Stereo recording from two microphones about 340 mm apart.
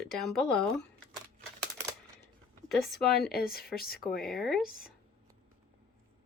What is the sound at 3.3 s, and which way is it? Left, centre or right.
Speech, left.